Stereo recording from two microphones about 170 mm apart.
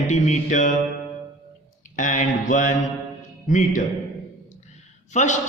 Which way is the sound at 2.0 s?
50° left (ahead or behind).